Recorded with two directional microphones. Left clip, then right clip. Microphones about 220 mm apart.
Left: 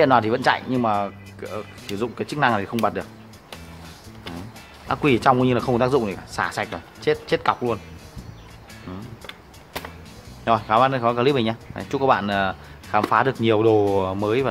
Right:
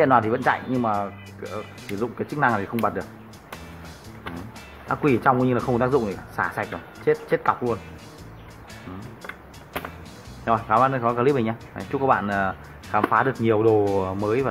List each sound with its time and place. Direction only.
0.0 s speech: 20° left (ahead or behind)
4.8 s speech: 20° left (ahead or behind)
10.4 s speech: 25° left (ahead or behind)